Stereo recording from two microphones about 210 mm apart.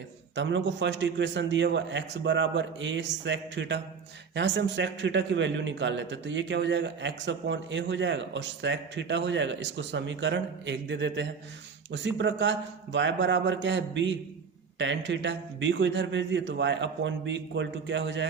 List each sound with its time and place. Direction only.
0.3 s a man's voice: 60° right (ahead or behind)